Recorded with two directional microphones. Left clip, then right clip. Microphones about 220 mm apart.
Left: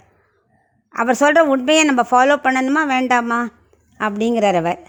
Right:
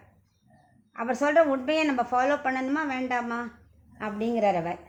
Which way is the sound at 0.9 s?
45° left (ahead or behind).